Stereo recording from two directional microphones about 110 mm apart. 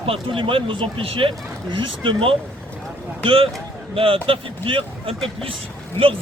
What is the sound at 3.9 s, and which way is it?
Speech, 55° right (ahead or behind).